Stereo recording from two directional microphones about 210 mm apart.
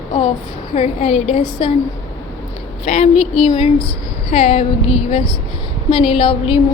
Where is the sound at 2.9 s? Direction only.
30° left (ahead or behind).